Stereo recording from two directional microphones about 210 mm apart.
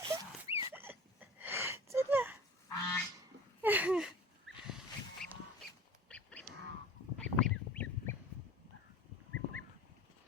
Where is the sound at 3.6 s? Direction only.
5° right (ahead or behind).